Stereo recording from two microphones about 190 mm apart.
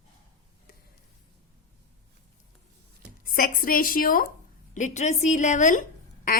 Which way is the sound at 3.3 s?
50° left (ahead or behind).